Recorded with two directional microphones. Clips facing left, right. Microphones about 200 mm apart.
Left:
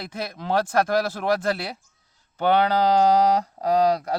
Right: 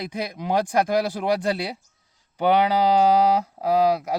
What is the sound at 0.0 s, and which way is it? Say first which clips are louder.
Speech: right 3 dB; 15° right (ahead or behind).